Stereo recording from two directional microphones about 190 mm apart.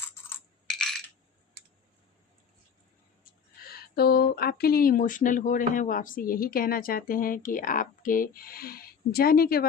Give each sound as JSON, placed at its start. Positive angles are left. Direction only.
{"t": 0.7, "sound": "coin", "side_deg": 0}
{"t": 3.7, "sound": "speech", "side_deg": 55}